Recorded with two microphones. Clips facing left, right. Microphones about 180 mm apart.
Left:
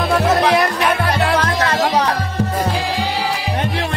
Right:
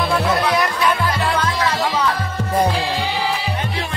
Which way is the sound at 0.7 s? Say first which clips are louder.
Left 2 dB; 60° left (ahead or behind).